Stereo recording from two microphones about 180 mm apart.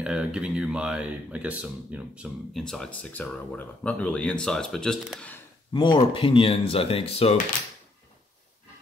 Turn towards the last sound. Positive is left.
turn(degrees=35)  # may be behind; listen again after turning